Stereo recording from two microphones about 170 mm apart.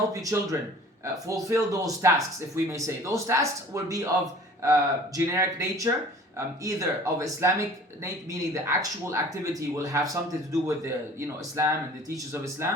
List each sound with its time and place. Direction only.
0.1 s speech: 20° right (ahead or behind)